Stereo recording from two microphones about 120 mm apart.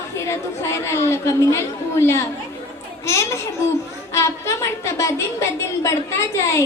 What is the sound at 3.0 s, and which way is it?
A woman's voice, 25° left (ahead or behind).